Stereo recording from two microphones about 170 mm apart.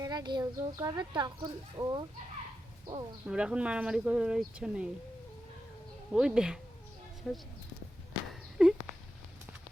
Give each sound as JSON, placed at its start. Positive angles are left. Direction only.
{"t": 0.0, "sound": "a woman's voice", "side_deg": -25}
{"t": 3.2, "sound": "speech", "side_deg": -5}
{"t": 6.1, "sound": "speech", "side_deg": -5}
{"t": 8.3, "sound": "a sound", "side_deg": -5}